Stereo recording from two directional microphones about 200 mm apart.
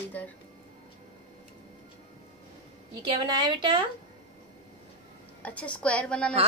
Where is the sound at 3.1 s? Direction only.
20° right (ahead or behind).